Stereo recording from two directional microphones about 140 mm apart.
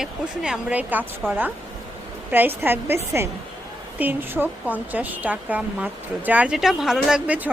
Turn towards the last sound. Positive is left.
turn(degrees=-5)  # may be behind; listen again after turning